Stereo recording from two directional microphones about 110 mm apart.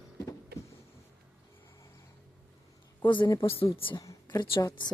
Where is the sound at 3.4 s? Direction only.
60° left (ahead or behind).